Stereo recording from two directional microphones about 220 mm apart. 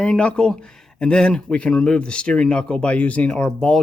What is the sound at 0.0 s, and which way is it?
Speech, 5° left (ahead or behind).